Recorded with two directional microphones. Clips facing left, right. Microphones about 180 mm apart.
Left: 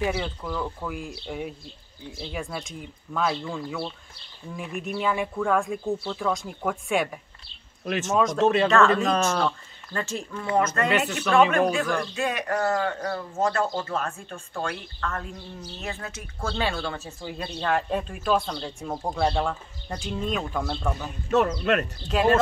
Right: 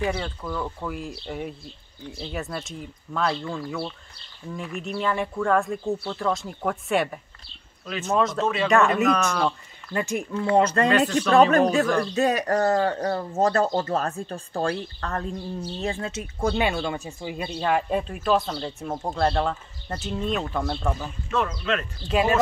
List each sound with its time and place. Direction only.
0.0 s speech: 5° left (ahead or behind)
4.8 s speech: 5° left (ahead or behind)
8.4 s speech: 60° left (ahead or behind)
8.6 s speech: 15° right (ahead or behind)
9.0 s speech: 25° left (ahead or behind)
9.9 s speech: 15° right (ahead or behind)
10.4 s speech: 30° right (ahead or behind)
10.9 s speech: 10° left (ahead or behind)
11.1 s speech: 35° right (ahead or behind); by 21.1 s centre (ahead or behind)
21.3 s speech: 45° left (ahead or behind)
22.0 s speech: 5° right (ahead or behind)